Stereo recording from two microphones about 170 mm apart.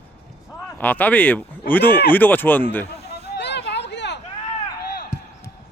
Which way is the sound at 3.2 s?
85° left.